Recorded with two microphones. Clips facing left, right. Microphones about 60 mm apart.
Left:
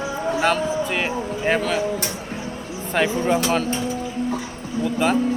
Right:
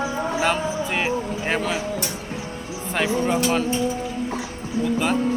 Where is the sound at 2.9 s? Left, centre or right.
Centre.